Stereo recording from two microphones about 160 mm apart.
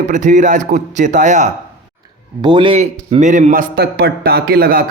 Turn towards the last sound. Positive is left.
turn(degrees=-75)  # may be behind; listen again after turning